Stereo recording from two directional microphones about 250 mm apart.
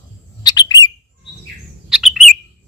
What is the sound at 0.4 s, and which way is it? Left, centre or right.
Bird, centre.